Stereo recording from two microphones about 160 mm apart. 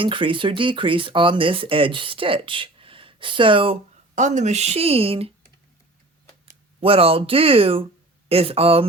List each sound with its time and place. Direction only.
0.0 s speech: 30° right (ahead or behind)
4.1 s speech: 50° right (ahead or behind)
6.7 s speech: 35° right (ahead or behind)